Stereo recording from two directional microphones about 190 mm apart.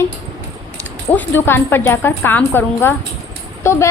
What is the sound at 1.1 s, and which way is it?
A woman's voice, 10° left (ahead or behind).